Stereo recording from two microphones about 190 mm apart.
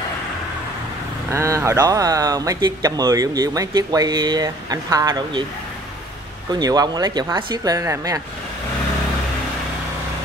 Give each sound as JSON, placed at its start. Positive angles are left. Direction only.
{"t": 1.3, "sound": "speech", "side_deg": -15}
{"t": 6.5, "sound": "speech", "side_deg": -20}